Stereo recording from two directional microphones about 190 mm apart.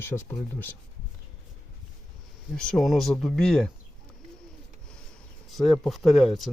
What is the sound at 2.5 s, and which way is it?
Speech, 5° left (ahead or behind).